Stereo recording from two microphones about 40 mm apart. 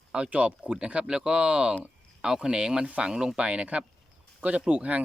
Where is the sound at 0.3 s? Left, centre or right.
Right.